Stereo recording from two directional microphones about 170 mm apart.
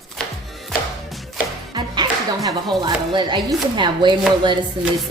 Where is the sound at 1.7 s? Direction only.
25° right (ahead or behind).